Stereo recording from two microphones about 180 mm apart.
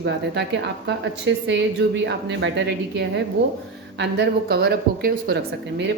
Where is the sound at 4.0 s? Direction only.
65° right (ahead or behind).